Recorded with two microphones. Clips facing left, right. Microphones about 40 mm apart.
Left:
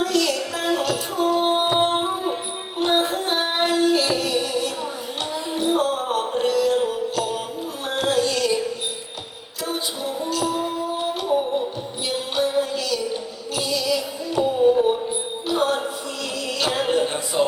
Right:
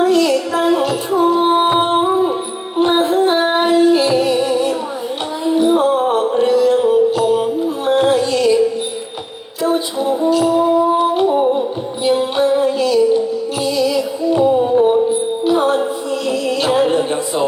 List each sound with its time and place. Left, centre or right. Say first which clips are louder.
0.0 s music: right 8 dB; right
10.0 s music: right 11 dB; right
15.4 s music: right 6 dB; centre